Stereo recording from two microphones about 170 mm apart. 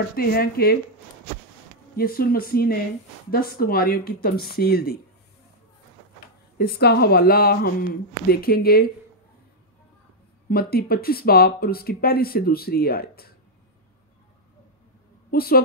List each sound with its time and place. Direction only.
0.1 s speech: 60° left (ahead or behind)
2.0 s speech: 60° left (ahead or behind)
6.6 s speech: 65° left (ahead or behind)
10.5 s speech: 65° left (ahead or behind)
15.3 s speech: 60° left (ahead or behind)